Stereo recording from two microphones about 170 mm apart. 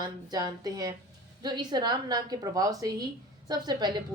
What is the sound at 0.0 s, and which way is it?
A woman's voice, 25° right (ahead or behind).